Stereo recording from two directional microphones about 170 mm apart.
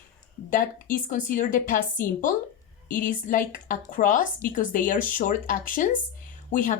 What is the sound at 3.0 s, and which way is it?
Speech, 50° left (ahead or behind).